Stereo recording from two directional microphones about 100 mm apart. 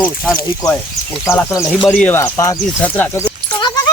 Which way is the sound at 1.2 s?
25° left (ahead or behind).